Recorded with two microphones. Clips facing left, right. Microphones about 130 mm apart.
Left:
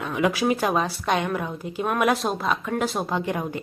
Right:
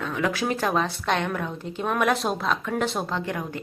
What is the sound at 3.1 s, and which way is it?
Speech, 20° left (ahead or behind).